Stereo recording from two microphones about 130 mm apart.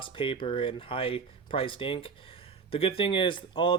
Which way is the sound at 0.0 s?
40° left (ahead or behind).